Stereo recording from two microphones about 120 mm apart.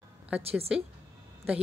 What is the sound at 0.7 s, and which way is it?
Speech, 10° right (ahead or behind).